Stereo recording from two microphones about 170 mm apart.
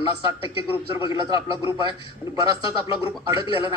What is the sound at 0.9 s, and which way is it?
Speech, 20° right (ahead or behind).